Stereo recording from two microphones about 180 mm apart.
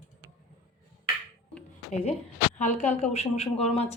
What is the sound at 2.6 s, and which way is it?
A woman's voice, 40° left (ahead or behind).